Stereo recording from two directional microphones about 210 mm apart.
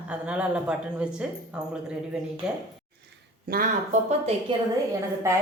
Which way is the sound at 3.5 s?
45° right (ahead or behind).